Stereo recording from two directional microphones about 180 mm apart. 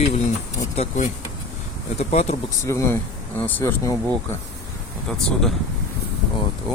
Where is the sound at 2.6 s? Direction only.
15° left (ahead or behind).